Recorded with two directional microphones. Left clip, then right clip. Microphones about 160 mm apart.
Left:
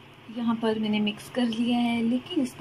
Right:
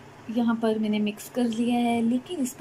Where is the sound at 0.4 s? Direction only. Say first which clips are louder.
Right 2 dB; 15° right (ahead or behind).